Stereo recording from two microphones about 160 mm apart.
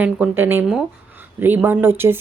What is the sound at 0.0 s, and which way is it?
A woman's voice, 10° right (ahead or behind).